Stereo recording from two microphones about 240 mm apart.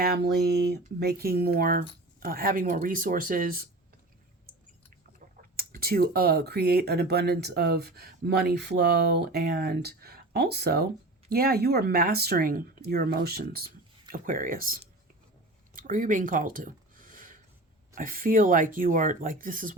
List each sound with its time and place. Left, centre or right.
0.0 s speech: right
5.5 s speech: right
15.7 s a sound: right
17.9 s speech: right